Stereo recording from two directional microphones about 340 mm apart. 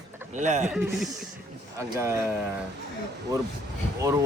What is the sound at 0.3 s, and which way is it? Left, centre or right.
Speech, right.